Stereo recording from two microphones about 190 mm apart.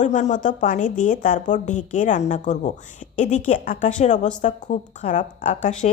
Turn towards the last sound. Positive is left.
turn(degrees=40)  # may be behind; listen again after turning